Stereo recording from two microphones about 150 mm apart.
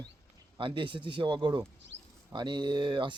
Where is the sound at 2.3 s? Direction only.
30° right (ahead or behind).